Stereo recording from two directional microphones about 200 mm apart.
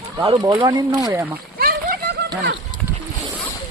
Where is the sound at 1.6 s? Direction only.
45° right (ahead or behind).